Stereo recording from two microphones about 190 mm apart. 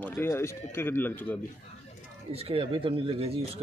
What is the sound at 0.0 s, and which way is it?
A man's voice, 10° left (ahead or behind).